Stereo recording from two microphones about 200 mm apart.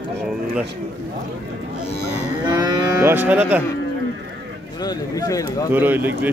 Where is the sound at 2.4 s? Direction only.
20° right (ahead or behind).